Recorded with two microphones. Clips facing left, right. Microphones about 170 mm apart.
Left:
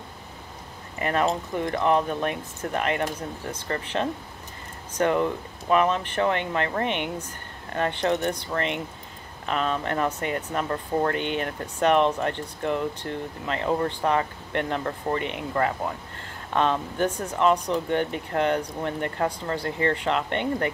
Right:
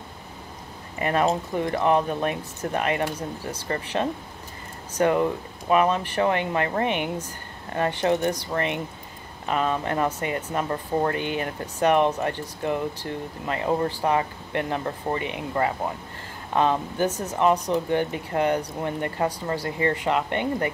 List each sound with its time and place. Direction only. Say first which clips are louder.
1.0 s speech: right 2 dB; 20° right (ahead or behind)
1.8 s speech: right 1 dB; 10° right (ahead or behind)